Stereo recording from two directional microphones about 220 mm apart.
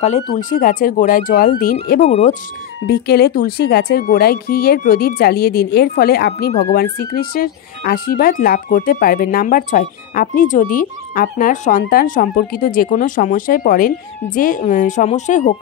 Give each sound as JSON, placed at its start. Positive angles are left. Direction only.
{"t": 0.0, "sound": "speech", "side_deg": 30}
{"t": 2.0, "sound": "speech", "side_deg": 30}
{"t": 2.8, "sound": "speech", "side_deg": 45}